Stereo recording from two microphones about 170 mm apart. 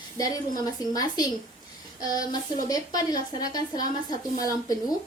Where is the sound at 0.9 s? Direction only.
20° left (ahead or behind).